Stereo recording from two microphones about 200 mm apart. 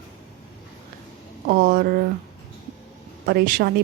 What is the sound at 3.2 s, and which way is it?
Speech, 45° right (ahead or behind).